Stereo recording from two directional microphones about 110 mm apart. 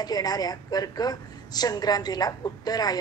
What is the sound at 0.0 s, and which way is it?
A woman's voice, 35° left (ahead or behind).